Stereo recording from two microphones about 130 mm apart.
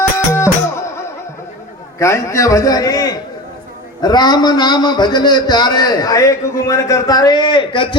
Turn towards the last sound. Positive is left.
turn(degrees=40)  # may be behind; listen again after turning